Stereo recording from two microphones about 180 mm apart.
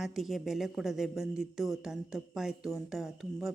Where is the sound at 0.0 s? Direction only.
Centre (ahead or behind).